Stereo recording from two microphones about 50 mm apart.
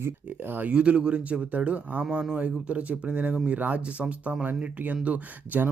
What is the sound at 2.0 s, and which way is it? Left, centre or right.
Speech, centre.